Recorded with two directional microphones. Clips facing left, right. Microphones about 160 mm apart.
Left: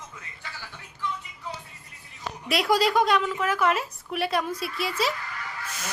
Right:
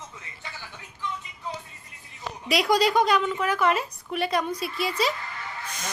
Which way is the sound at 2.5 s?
Centre (ahead or behind).